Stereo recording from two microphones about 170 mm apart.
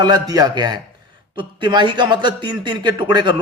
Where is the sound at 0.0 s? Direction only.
25° right (ahead or behind).